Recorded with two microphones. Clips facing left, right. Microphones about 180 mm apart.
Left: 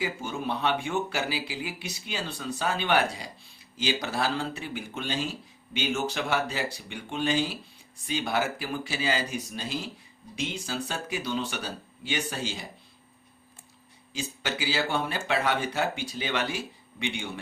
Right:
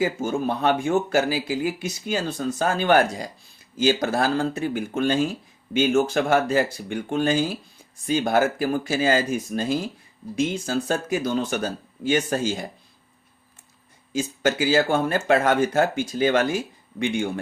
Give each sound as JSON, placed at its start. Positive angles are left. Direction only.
{"t": 0.0, "sound": "speech", "side_deg": -45}
{"t": 14.1, "sound": "speech", "side_deg": -50}